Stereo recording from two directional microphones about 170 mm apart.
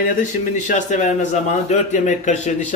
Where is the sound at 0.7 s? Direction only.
45° left (ahead or behind).